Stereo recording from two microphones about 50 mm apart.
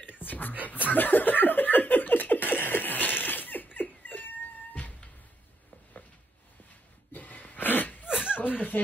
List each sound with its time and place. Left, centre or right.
0.0 s whispering: left
0.8 s laughter: left
7.1 s a sound: left
8.1 s slap: centre
8.7 s speech: left